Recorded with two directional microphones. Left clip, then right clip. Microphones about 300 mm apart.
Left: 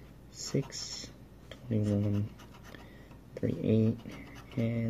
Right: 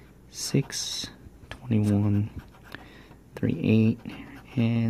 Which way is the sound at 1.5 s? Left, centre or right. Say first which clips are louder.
Right 6 dB; right.